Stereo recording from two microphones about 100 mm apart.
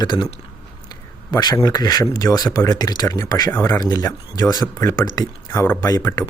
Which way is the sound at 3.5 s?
25° left (ahead or behind).